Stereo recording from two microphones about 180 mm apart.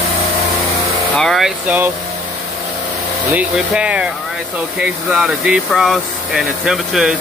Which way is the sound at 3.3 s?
10° right (ahead or behind).